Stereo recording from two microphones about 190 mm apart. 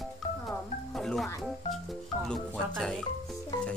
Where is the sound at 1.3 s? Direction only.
15° left (ahead or behind).